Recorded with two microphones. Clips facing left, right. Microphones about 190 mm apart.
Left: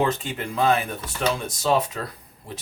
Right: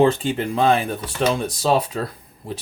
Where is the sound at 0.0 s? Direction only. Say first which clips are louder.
Right 7 dB; 30° right (ahead or behind).